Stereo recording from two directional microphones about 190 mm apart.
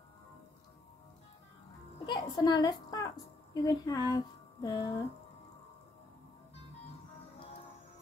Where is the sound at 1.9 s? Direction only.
25° left (ahead or behind).